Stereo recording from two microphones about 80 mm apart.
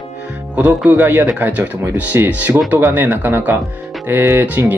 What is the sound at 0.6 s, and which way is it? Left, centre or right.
Speech, centre.